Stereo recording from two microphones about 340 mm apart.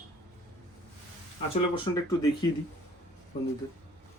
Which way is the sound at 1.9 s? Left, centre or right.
Centre.